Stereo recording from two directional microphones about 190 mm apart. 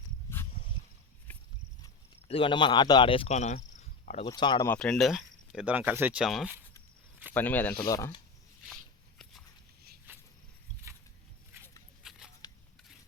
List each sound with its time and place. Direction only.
0.3 s a sound: 15° left (ahead or behind)
2.2 s speech: 30° left (ahead or behind)
4.3 s speech: 25° left (ahead or behind)
4.7 s speech: 5° left (ahead or behind)
7.3 s speech: 10° left (ahead or behind)
12.0 s a sound: 5° right (ahead or behind)
12.4 s scissors: 20° left (ahead or behind)